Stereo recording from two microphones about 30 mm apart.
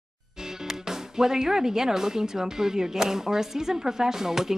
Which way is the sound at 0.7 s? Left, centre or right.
Centre.